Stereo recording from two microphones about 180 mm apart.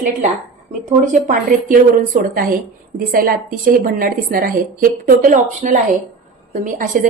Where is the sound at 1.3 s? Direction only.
50° right (ahead or behind).